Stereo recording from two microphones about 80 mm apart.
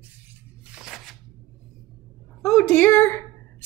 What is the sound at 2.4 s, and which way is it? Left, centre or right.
Speech, left.